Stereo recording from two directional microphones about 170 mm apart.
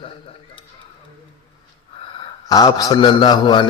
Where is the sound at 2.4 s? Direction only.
20° left (ahead or behind).